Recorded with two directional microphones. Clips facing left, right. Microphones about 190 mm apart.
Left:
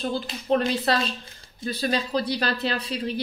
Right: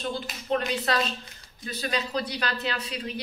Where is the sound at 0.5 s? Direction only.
30° left (ahead or behind).